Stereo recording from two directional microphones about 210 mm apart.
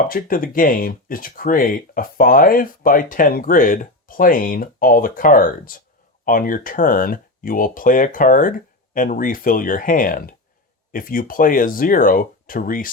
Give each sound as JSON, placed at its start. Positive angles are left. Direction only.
{"t": 0.1, "sound": "speech", "side_deg": 40}